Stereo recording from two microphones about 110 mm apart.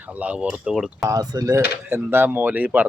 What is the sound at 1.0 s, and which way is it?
Speech, 30° right (ahead or behind).